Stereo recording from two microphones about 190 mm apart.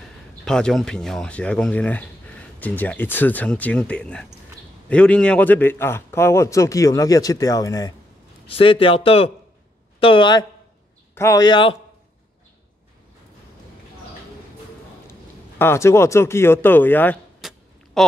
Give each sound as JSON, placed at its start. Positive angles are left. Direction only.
{"t": 0.5, "sound": "speech", "side_deg": 5}
{"t": 8.5, "sound": "speech", "side_deg": 30}
{"t": 15.6, "sound": "speech", "side_deg": 15}
{"t": 17.4, "sound": "a sound", "side_deg": 0}